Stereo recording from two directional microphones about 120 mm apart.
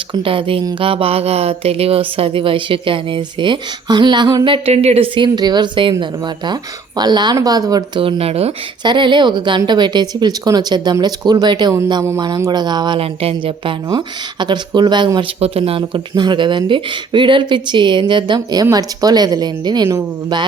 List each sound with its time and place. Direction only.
0.1 s speech: 45° right (ahead or behind)
4.5 s speech: 55° right (ahead or behind)
5.1 s speech: 40° right (ahead or behind); by 8.5 s 55° right (ahead or behind)
8.8 s speech: 40° right (ahead or behind)
13.0 s speech: 50° right (ahead or behind)
15.4 s speech: 55° right (ahead or behind); by 20.1 s 30° right (ahead or behind)